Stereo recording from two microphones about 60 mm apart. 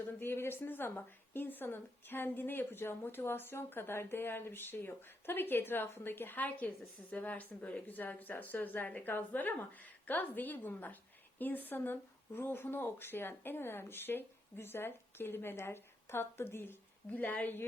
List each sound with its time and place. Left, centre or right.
0.2 s a woman's voice: left
17.1 s a woman's voice: left